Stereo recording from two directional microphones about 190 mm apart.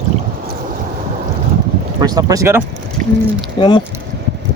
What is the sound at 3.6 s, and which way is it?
Speech, 25° left (ahead or behind).